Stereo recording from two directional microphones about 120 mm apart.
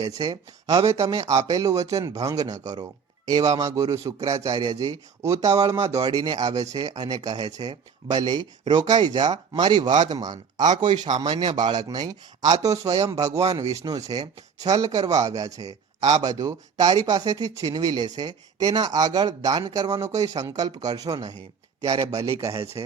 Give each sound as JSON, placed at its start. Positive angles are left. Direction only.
{"t": 0.0, "sound": "speech", "side_deg": -35}